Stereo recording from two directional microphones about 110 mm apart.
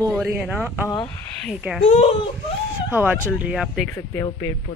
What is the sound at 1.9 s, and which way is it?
Speech, 90° left.